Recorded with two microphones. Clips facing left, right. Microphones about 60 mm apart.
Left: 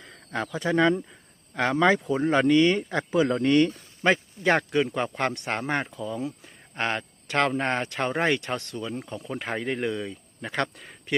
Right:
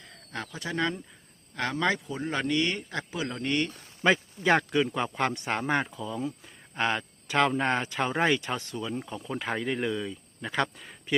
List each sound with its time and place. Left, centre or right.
0.3 s speech: left
1.5 s speech: left
2.1 s speech: left
3.2 s speech: left
4.1 s speech: centre
10.6 s speech: centre